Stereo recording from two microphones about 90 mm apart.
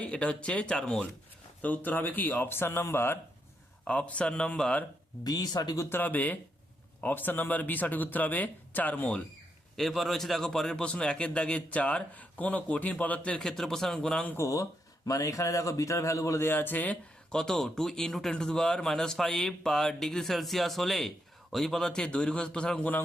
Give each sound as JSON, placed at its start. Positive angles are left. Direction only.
{"t": 0.0, "sound": "speech", "side_deg": 10}
{"t": 3.8, "sound": "speech", "side_deg": 15}
{"t": 5.2, "sound": "speech", "side_deg": 45}
{"t": 5.9, "sound": "speech", "side_deg": 20}
{"t": 9.7, "sound": "speech", "side_deg": 0}
{"t": 14.3, "sound": "speech", "side_deg": 35}